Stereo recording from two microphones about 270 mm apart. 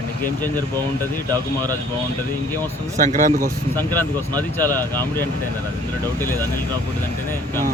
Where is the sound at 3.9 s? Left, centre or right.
Centre.